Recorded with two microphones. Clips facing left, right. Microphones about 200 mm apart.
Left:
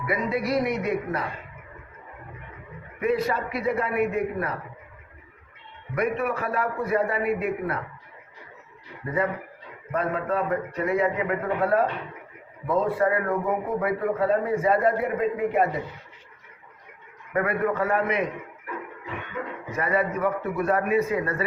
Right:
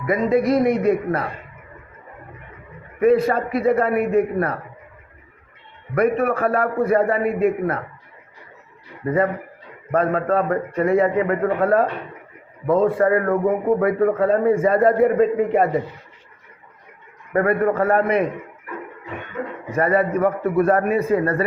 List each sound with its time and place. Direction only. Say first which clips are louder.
0.0 s a man's voice: right 8 dB; 45° right (ahead or behind)
3.0 s a man's voice: right 8 dB; 50° right (ahead or behind)
5.9 s a man's voice: right 7 dB; 55° right (ahead or behind)
9.0 s a man's voice: right 7 dB; 50° right (ahead or behind)
15.1 s a man's voice: right 7 dB; 40° right (ahead or behind)
17.3 s a man's voice: right 6 dB; 50° right (ahead or behind)
19.7 s a man's voice: right 7 dB; 50° right (ahead or behind)